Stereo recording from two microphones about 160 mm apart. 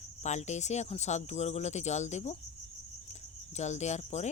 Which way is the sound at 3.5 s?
45° left (ahead or behind).